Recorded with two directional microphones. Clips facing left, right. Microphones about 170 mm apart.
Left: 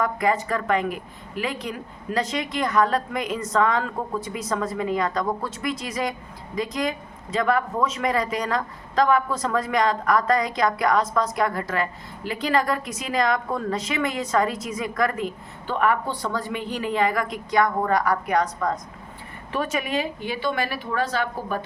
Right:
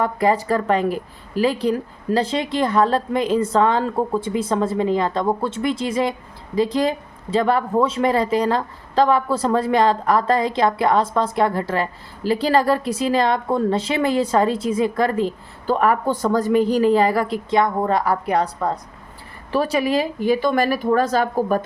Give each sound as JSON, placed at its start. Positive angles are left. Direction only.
{"t": 0.0, "sound": "speech", "side_deg": -30}